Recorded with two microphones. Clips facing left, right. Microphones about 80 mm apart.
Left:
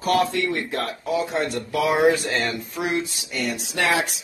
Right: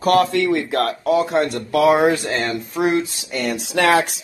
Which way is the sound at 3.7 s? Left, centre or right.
Right.